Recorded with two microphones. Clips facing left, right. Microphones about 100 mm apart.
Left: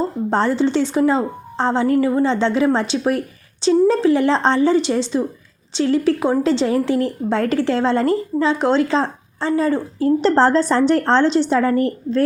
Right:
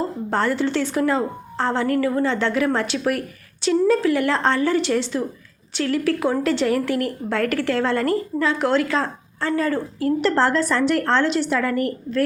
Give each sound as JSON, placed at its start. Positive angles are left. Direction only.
{"t": 0.3, "sound": "a woman's voice", "side_deg": 25}